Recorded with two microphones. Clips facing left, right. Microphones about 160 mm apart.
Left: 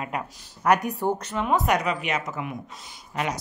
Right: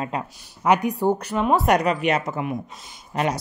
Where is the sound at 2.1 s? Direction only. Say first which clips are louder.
Right 5 dB; 30° right (ahead or behind).